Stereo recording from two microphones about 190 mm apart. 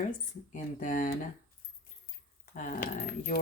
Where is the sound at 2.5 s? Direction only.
45° left (ahead or behind).